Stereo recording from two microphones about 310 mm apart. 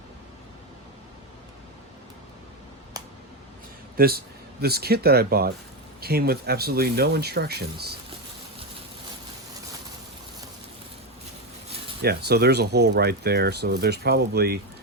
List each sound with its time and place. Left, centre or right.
3.9 s speech: right
12.0 s speech: right